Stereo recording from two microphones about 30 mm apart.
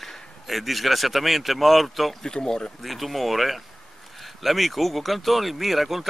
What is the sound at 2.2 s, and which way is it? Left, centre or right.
Speech, left.